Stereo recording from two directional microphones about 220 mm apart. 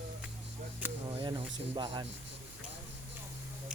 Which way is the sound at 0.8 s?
5° right (ahead or behind).